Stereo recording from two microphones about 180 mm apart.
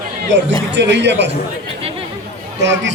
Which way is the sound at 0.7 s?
75° right (ahead or behind).